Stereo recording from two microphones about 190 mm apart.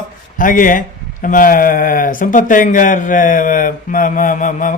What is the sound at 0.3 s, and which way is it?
Speech, 45° left (ahead or behind).